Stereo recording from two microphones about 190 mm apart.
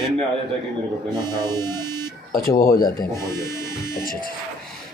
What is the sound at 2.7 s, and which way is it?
Speech, 50° left (ahead or behind).